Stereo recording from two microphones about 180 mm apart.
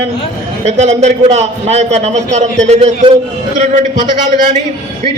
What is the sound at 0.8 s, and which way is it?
A man's voice, 35° right (ahead or behind).